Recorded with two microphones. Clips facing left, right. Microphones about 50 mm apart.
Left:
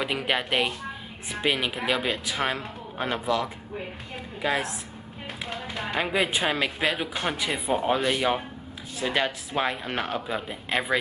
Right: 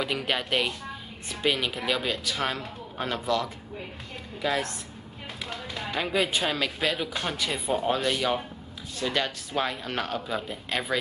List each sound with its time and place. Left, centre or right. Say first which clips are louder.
0.0 s speech: left 2 dB; centre
5.9 s speech: left 1 dB; centre